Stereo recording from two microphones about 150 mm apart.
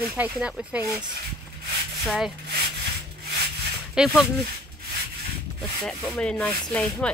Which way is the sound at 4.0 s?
5° right (ahead or behind).